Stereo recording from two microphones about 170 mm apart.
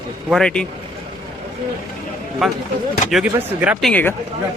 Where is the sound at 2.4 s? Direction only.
Centre (ahead or behind).